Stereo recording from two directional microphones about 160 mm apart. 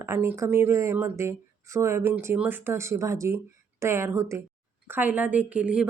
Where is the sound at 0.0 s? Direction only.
15° right (ahead or behind).